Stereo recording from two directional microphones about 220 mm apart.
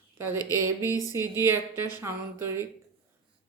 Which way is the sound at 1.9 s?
10° right (ahead or behind).